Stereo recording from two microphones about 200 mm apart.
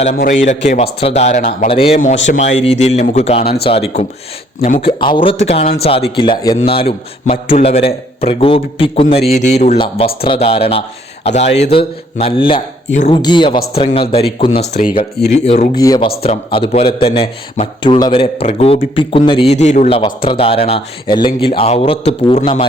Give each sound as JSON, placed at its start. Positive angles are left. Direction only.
{"t": 0.7, "sound": "a man's voice", "side_deg": 30}
{"t": 2.1, "sound": "speech", "side_deg": 65}
{"t": 2.4, "sound": "a man's voice", "side_deg": 35}
{"t": 12.5, "sound": "speech", "side_deg": 35}
{"t": 13.2, "sound": "a man's voice", "side_deg": 25}
{"t": 15.7, "sound": "a man's voice", "side_deg": 20}